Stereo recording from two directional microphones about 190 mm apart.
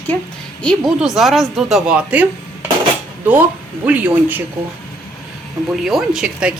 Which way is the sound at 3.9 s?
10° right (ahead or behind).